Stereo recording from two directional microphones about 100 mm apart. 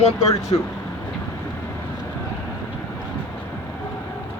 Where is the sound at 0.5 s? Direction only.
60° left (ahead or behind).